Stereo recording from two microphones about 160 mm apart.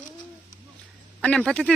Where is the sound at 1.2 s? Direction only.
5° left (ahead or behind).